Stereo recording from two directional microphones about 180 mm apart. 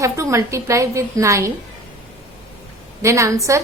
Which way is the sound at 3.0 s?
15° right (ahead or behind).